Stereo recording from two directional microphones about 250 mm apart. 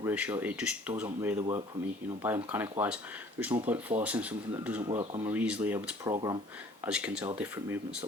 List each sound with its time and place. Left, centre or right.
0.0 s speech: centre
6.1 s speech: centre
6.8 s speech: centre